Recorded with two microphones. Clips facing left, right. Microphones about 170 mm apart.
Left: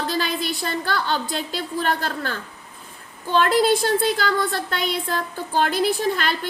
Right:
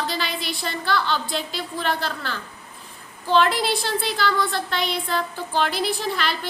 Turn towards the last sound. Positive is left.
turn(degrees=45)  # may be behind; listen again after turning